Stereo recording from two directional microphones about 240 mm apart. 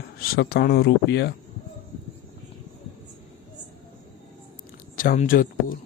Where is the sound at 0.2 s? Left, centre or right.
Left.